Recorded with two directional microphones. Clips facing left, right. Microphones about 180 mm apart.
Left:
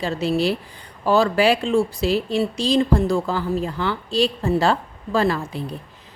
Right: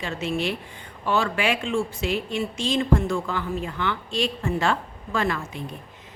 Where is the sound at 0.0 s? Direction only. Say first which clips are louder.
Left 6 dB; 35° left (ahead or behind).